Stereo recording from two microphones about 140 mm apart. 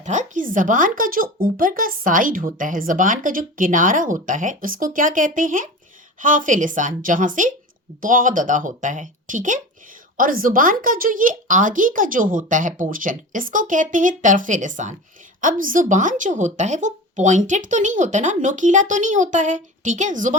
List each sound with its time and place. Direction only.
0.0 s speech: 60° right (ahead or behind)
10.2 s speech: 85° right; by 14.9 s 65° right (ahead or behind)
15.4 s speech: 75° right (ahead or behind)